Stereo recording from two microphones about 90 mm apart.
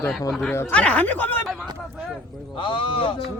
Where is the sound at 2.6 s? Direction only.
70° left (ahead or behind).